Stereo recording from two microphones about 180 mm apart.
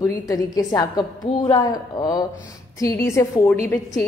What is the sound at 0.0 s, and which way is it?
A woman's voice, 20° left (ahead or behind).